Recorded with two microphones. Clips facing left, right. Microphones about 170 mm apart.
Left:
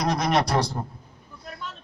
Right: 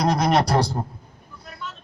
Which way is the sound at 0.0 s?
35° right (ahead or behind).